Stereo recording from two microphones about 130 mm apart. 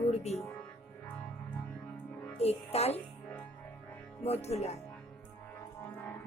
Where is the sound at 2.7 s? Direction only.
55° left (ahead or behind).